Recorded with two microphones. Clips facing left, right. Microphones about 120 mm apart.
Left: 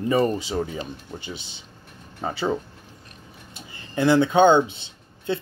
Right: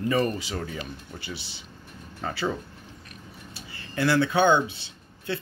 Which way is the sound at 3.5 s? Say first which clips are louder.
Left 5 dB; 20° left (ahead or behind).